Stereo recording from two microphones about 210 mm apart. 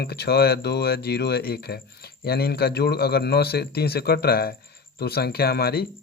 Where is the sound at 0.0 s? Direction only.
50° left (ahead or behind).